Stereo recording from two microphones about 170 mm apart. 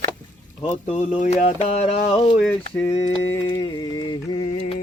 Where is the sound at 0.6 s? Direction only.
35° left (ahead or behind).